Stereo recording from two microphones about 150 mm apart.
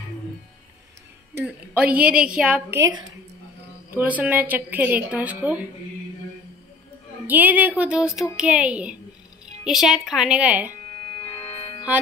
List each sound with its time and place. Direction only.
1.4 s speech: 10° right (ahead or behind)
2.8 s speech: 30° right (ahead or behind)
3.9 s speech: 10° right (ahead or behind)
7.2 s a woman's voice: 10° right (ahead or behind)
11.2 s music: 35° left (ahead or behind)